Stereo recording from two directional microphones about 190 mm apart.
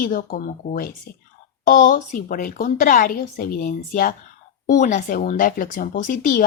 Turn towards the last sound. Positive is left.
turn(degrees=45)  # may be behind; listen again after turning